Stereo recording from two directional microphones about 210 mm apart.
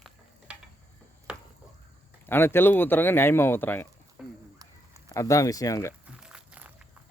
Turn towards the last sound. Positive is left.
turn(degrees=-5)  # may be behind; listen again after turning